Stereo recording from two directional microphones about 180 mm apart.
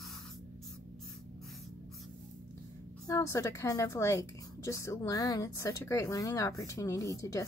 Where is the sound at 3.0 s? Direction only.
15° left (ahead or behind).